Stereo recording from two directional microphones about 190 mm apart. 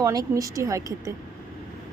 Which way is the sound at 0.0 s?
20° right (ahead or behind).